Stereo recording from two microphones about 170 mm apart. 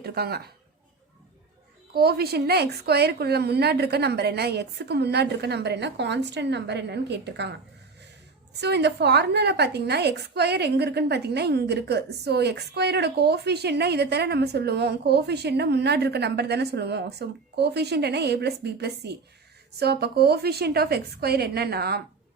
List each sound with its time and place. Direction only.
0.0 s a woman's voice: 65° right (ahead or behind)
1.9 s a woman's voice: 65° right (ahead or behind); by 7.5 s 85° right
8.6 s a woman's voice: 80° right